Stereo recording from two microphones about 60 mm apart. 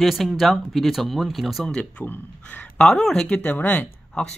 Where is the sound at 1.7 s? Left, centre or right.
Centre.